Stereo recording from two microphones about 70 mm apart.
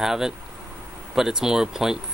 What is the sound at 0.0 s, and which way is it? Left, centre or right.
Speech, centre.